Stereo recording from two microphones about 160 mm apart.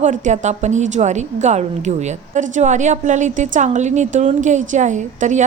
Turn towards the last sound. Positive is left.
turn(degrees=-50)  # may be behind; listen again after turning